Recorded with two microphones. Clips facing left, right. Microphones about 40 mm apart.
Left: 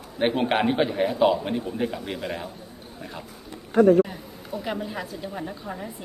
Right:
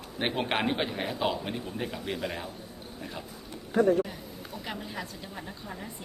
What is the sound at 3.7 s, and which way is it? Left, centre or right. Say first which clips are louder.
Speech: left 7 dB; left.